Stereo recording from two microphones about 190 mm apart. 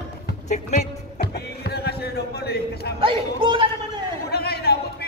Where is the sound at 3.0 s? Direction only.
30° right (ahead or behind).